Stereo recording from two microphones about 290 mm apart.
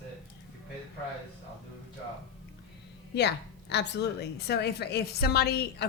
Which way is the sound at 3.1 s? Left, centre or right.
Left.